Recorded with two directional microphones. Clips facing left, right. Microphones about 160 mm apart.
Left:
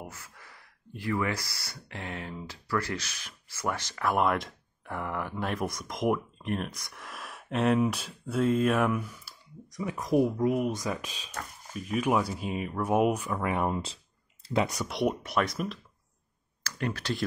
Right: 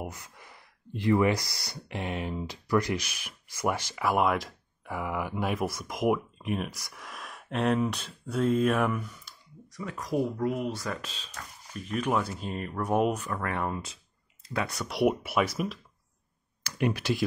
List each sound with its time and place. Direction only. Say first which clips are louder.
0.0 s speech: right 5 dB; 20° right (ahead or behind); by 9.3 s 5° left (ahead or behind)
9.7 s speech: left 4 dB; 15° left (ahead or behind)
14.9 s speech: right 3 dB; 5° right (ahead or behind)
16.6 s speech: right 4 dB; 15° right (ahead or behind)